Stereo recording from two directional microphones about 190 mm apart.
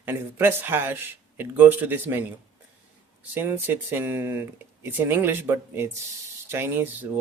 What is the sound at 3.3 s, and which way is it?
Speech, 10° right (ahead or behind).